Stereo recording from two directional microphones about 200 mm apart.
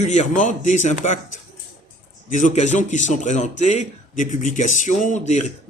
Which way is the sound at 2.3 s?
40° left (ahead or behind).